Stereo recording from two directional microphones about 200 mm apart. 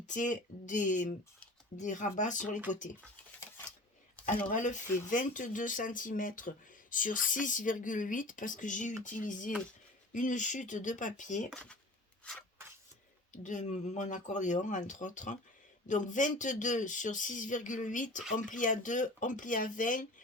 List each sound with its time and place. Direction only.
0.0 s speech: 40° left (ahead or behind)
4.4 s speech: 40° left (ahead or behind)
11.5 s speech: 5° left (ahead or behind)
12.2 s a sound: 5° left (ahead or behind)
13.3 s speech: 40° left (ahead or behind)